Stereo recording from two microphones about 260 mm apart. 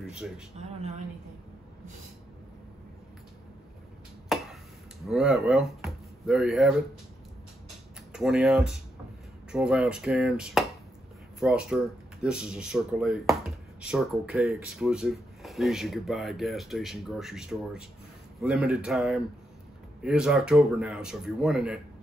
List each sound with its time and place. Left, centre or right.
0.0 s speech: centre
0.6 s speech: right
4.3 s a sound: centre
5.0 s speech: centre
8.1 s speech: centre